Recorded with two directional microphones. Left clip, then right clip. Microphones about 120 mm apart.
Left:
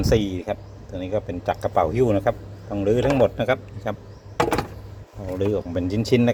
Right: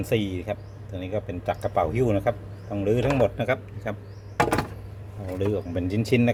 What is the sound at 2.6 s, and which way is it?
Speech, 35° left (ahead or behind).